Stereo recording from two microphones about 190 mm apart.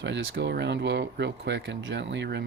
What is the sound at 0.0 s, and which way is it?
Speech, 70° right (ahead or behind).